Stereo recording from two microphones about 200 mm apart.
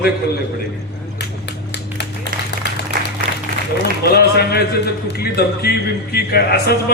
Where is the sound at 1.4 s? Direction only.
55° left (ahead or behind).